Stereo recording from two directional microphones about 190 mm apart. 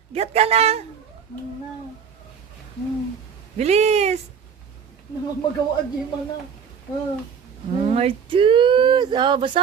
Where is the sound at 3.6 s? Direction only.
35° right (ahead or behind).